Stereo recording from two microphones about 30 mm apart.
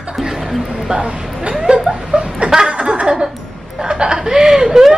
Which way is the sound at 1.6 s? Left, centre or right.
Right.